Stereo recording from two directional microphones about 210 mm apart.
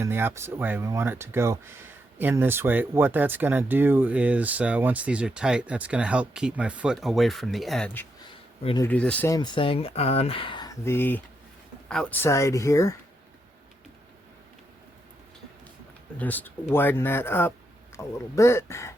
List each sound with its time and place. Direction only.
0.0 s speech: 10° right (ahead or behind)
8.6 s speech: 20° left (ahead or behind)
8.9 s speech: 5° left (ahead or behind)
16.1 s speech: 10° left (ahead or behind)